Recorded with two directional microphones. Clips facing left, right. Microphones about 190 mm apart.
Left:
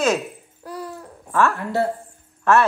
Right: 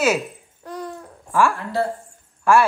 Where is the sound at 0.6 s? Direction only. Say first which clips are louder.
Right 1 dB; 5° left (ahead or behind).